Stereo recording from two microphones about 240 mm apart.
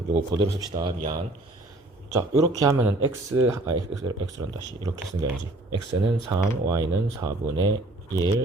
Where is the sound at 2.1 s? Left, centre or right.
Centre.